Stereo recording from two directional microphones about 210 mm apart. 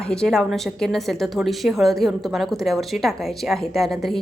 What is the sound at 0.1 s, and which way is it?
A woman's voice, 5° left (ahead or behind).